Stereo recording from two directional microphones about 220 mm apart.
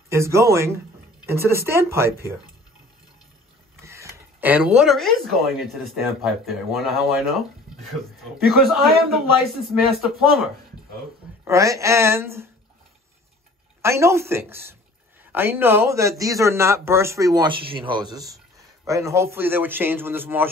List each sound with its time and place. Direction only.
0.1 s speech: 15° right (ahead or behind)
3.8 s speech: 15° right (ahead or behind)
11.4 s speech: 15° right (ahead or behind)
13.8 s speech: 15° right (ahead or behind)